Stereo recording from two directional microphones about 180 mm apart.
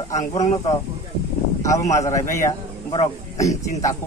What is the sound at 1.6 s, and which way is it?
Speech, 15° left (ahead or behind).